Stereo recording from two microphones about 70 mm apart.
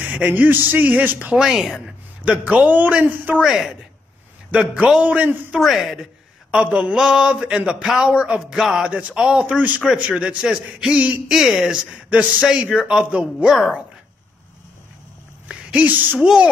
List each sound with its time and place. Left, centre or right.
0.0 s a man's voice: right
1.4 s speech: centre
2.2 s a man's voice: centre
3.3 s speech: centre
4.5 s a man's voice: centre
5.6 s speech: centre
6.5 s a man's voice: centre
11.2 s speech: centre
13.5 s speech: centre
15.4 s a sound: centre
16.2 s speech: centre